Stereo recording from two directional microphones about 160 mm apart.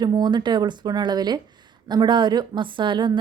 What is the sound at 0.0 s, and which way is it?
Speech, 25° right (ahead or behind).